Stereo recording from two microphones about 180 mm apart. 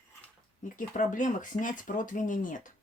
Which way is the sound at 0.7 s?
45° left (ahead or behind).